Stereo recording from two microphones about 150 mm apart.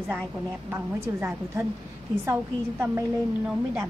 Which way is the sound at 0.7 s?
15° right (ahead or behind).